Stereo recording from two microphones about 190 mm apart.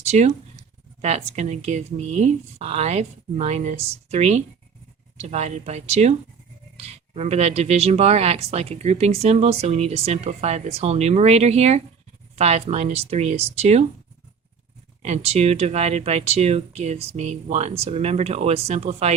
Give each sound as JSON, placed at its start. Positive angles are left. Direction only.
{"t": 0.1, "sound": "speech", "side_deg": -35}
{"t": 15.0, "sound": "speech", "side_deg": -35}